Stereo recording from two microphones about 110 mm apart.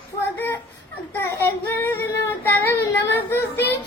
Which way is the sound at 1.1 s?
20° left (ahead or behind).